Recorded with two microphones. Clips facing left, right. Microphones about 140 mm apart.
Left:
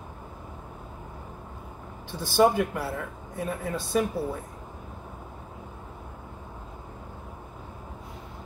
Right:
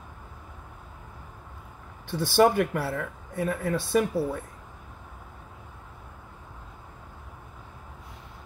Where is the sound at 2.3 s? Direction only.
60° right (ahead or behind).